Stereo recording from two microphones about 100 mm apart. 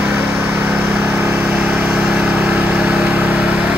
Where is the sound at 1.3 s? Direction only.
5° right (ahead or behind).